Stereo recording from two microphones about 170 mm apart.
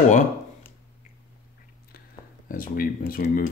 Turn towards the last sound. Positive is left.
turn(degrees=60)  # may be behind; listen again after turning